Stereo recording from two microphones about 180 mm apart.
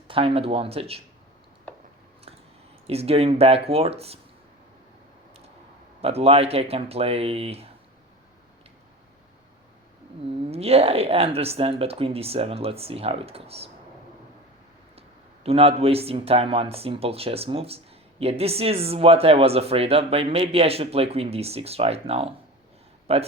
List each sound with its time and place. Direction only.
0.1 s speech: 30° right (ahead or behind)
2.8 s speech: 35° right (ahead or behind)
6.0 s speech: 35° right (ahead or behind)
10.5 s speech: 35° right (ahead or behind)
15.4 s speech: 35° right (ahead or behind)